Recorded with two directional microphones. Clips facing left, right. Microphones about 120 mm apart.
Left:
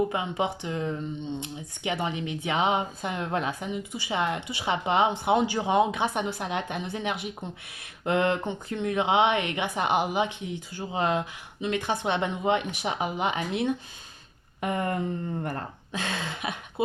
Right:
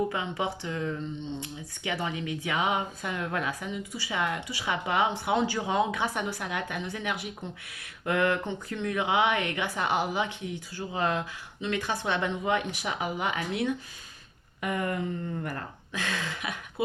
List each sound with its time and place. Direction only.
0.1 s speech: 20° left (ahead or behind)
14.6 s a sound: 30° left (ahead or behind)
15.4 s speech: 25° left (ahead or behind)